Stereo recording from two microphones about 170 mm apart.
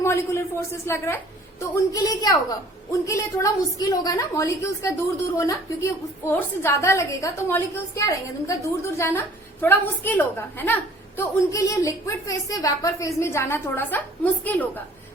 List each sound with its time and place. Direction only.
0.0 s a man's voice: 15° left (ahead or behind)